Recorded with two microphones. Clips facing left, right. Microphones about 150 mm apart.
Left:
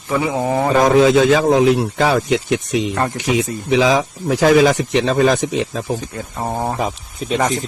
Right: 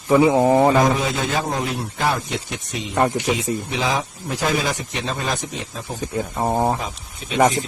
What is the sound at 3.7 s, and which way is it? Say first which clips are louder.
Speech: left 9 dB; 90° left.